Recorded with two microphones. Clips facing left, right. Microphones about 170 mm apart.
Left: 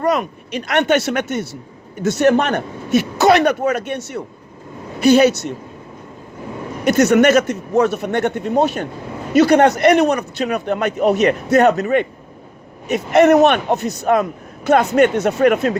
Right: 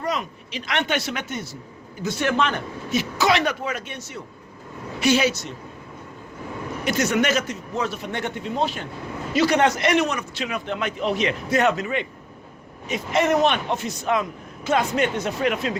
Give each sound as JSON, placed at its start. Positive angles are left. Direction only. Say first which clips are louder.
{"t": 0.0, "sound": "a man's voice", "louder": "left 9 dB", "side_deg": 55}
{"t": 2.1, "sound": "a man's voice", "louder": "left 8 dB", "side_deg": 45}
{"t": 6.8, "sound": "a man's voice", "louder": "left 10 dB", "side_deg": 60}
{"t": 10.0, "sound": "speech", "louder": "left 8 dB", "side_deg": 35}
{"t": 12.9, "sound": "a man's voice", "louder": "left 9 dB", "side_deg": 60}
{"t": 15.4, "sound": "speech", "louder": "left 10 dB", "side_deg": 50}